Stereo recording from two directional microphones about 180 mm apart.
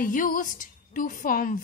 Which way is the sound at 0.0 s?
50° left (ahead or behind).